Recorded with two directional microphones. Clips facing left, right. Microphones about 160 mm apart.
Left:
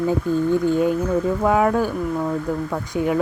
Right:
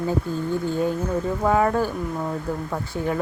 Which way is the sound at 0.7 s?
15° left (ahead or behind).